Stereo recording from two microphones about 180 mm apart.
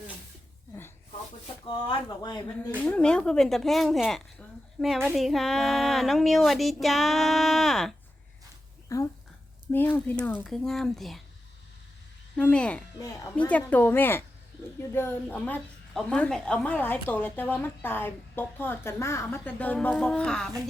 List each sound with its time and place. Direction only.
1.6 s speech: 25° left (ahead or behind)
2.8 s speech: 5° left (ahead or behind)
8.9 s speech: 20° left (ahead or behind); by 11.2 s centre (ahead or behind)
12.4 s a woman's voice: 5° left (ahead or behind)
13.0 s speech: 20° left (ahead or behind)
13.3 s a woman's voice: 5° left (ahead or behind)